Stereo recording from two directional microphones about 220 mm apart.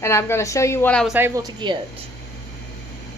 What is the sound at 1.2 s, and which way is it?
Speech, 20° right (ahead or behind).